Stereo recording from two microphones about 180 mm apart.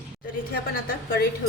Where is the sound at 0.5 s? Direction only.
55° left (ahead or behind).